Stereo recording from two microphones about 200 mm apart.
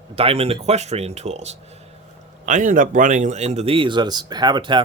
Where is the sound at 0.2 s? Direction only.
30° right (ahead or behind).